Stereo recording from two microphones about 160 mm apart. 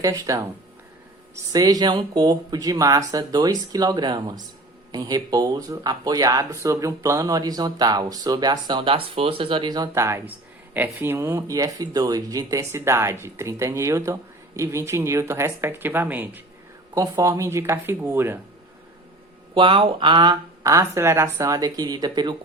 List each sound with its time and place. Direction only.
0.0 s speech: 20° right (ahead or behind)
1.5 s speech: 25° right (ahead or behind)
19.5 s speech: 30° right (ahead or behind)